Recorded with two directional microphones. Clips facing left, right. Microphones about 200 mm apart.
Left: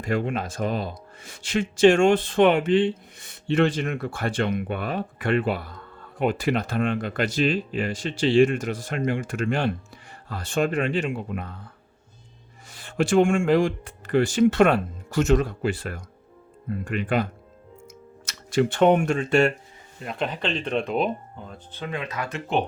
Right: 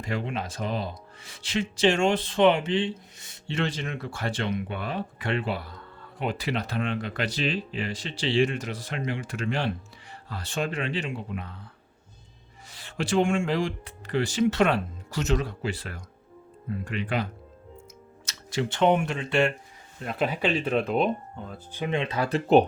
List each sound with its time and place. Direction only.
0.0 s speech: 50° left (ahead or behind)
12.7 s speech: 50° left (ahead or behind)
18.3 s speech: 55° left (ahead or behind)
20.0 s speech: centre (ahead or behind)
21.7 s speech: 20° right (ahead or behind); by 22.6 s 35° right (ahead or behind)